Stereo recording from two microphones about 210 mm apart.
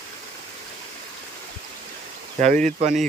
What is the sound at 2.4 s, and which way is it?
Speech, 35° right (ahead or behind).